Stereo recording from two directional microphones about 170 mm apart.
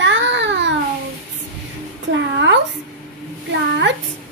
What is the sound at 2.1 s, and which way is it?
Speech, 90° right.